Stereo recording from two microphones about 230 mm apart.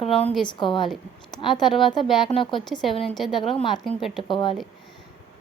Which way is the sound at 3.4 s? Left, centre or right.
Left.